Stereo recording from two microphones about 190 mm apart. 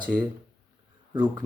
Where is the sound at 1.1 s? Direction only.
20° right (ahead or behind).